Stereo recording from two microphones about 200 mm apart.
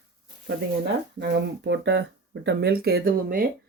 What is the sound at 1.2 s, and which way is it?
Speech, 60° right (ahead or behind).